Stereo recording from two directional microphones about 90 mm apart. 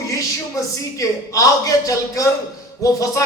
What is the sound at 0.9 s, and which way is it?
Speech, 40° left (ahead or behind).